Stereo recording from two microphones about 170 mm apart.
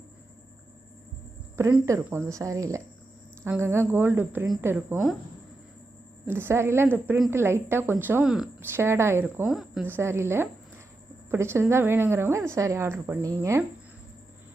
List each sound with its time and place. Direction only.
1.5 s a woman's voice: 15° right (ahead or behind)
6.2 s a woman's voice: 15° right (ahead or behind)
8.7 s a woman's voice: 15° right (ahead or behind)
9.8 s a woman's voice: 15° right (ahead or behind)